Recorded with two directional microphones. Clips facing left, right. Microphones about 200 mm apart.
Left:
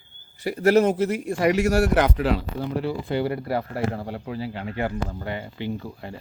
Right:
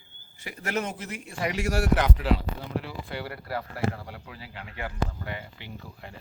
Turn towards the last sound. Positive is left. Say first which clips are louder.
# left 11 dB
turn(degrees=30)  # may be behind; listen again after turning